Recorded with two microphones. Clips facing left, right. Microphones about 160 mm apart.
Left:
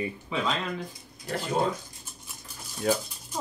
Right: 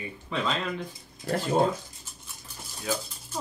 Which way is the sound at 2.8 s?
50° left (ahead or behind).